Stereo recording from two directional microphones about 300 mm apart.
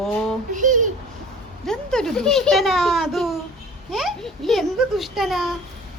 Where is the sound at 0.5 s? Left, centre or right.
Right.